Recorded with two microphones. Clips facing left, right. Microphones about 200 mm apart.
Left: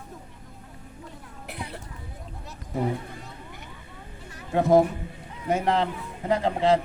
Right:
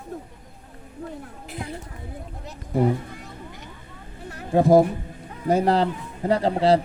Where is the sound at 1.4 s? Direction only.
65° left (ahead or behind).